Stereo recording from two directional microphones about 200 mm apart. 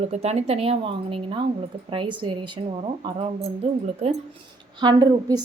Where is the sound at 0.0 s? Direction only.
30° right (ahead or behind).